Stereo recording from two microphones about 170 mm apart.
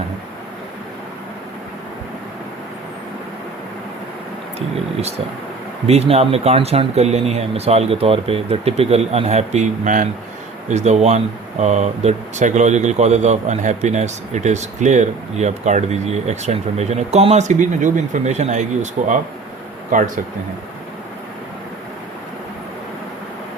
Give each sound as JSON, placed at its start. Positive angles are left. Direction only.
{"t": 5.9, "sound": "speech", "side_deg": -35}